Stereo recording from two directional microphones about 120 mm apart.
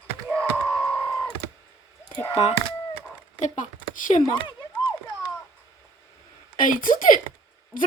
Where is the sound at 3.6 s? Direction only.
90° left.